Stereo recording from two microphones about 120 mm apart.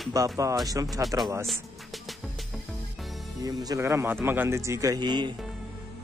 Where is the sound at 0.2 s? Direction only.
30° right (ahead or behind).